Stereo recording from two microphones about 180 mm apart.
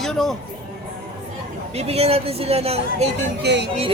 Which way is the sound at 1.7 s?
35° right (ahead or behind).